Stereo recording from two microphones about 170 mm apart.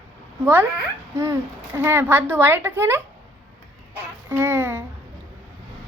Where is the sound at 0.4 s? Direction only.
10° right (ahead or behind).